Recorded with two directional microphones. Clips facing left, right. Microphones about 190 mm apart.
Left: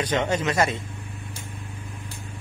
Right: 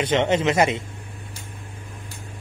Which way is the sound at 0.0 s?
25° right (ahead or behind).